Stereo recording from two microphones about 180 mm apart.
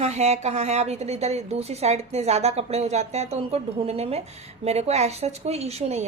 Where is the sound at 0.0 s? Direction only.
40° right (ahead or behind).